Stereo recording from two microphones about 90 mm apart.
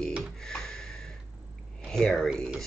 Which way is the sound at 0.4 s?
5° left (ahead or behind).